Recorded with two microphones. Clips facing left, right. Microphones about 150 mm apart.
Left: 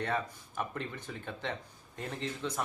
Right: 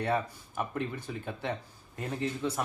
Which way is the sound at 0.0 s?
10° right (ahead or behind).